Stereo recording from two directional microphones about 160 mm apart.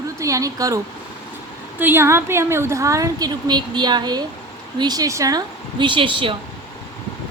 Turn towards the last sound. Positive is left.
turn(degrees=-35)  # may be behind; listen again after turning